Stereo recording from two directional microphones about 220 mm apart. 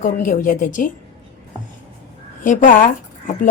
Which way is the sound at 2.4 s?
35° left (ahead or behind).